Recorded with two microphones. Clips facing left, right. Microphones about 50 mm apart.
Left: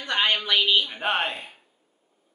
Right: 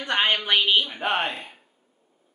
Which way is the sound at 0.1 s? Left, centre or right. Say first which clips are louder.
Right 1 dB; right.